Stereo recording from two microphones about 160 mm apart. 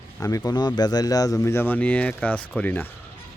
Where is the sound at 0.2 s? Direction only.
20° left (ahead or behind).